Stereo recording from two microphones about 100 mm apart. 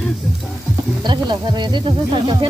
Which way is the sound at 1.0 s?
50° right (ahead or behind).